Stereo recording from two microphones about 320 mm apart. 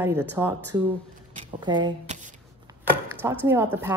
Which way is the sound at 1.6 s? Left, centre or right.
Centre.